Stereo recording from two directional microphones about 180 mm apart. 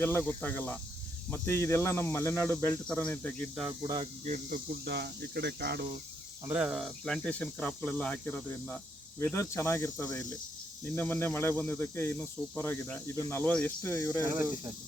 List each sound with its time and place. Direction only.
0.0 s speech: 10° left (ahead or behind)
3.7 s speech: 20° right (ahead or behind)
4.0 s speech: 45° right (ahead or behind); by 5.9 s 60° right (ahead or behind)
6.4 s speech: 10° right (ahead or behind); by 14.2 s 15° left (ahead or behind)
14.2 s speech: 20° right (ahead or behind)